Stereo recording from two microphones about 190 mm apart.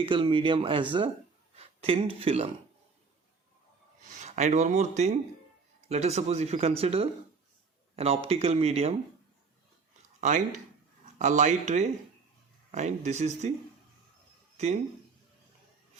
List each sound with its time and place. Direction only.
0.0 s speech: 25° right (ahead or behind)
4.2 s speech: 40° right (ahead or behind)
10.2 s speech: 40° right (ahead or behind)